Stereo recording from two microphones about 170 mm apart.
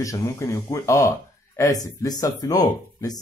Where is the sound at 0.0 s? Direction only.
20° left (ahead or behind).